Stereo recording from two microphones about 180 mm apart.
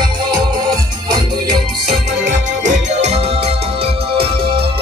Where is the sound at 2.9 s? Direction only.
40° right (ahead or behind).